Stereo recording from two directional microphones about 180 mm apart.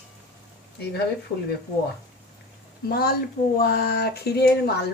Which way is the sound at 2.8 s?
60° left (ahead or behind).